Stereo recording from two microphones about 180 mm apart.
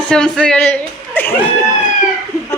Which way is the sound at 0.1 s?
5° left (ahead or behind).